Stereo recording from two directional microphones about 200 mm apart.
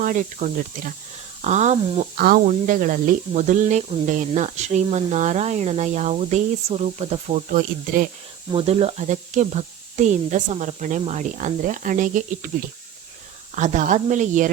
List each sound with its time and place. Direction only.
0.0 s speech: 40° right (ahead or behind)
2.1 s speech: 45° right (ahead or behind)
8.5 s speech: 30° right (ahead or behind)
13.6 s speech: 40° right (ahead or behind)